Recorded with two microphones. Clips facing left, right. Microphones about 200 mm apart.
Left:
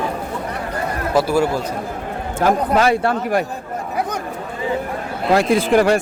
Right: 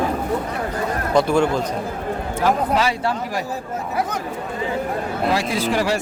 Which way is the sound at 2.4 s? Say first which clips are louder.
Left 3 dB; 50° left (ahead or behind).